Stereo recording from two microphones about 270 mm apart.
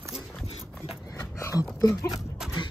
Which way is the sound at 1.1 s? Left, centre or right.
Centre.